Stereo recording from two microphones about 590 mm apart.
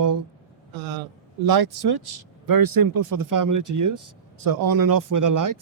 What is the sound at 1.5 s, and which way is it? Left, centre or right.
Speech, right.